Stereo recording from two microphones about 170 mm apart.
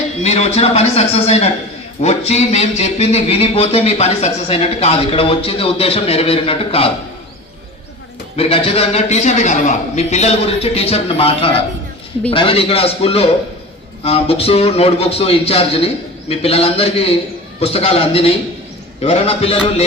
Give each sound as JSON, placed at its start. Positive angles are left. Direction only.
{"t": 0.2, "sound": "speech", "side_deg": 40}
{"t": 8.4, "sound": "speech", "side_deg": 35}